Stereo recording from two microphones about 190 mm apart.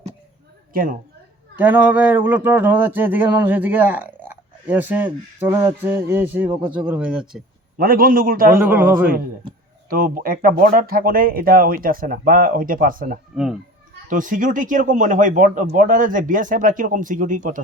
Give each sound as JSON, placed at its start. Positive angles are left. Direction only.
{"t": 0.7, "sound": "a woman's voice", "side_deg": -50}
{"t": 1.5, "sound": "speech", "side_deg": -10}
{"t": 7.8, "sound": "speech", "side_deg": -50}
{"t": 8.6, "sound": "speech", "side_deg": -10}
{"t": 9.9, "sound": "speech", "side_deg": -50}
{"t": 13.3, "sound": "speech", "side_deg": -5}
{"t": 14.1, "sound": "speech", "side_deg": -45}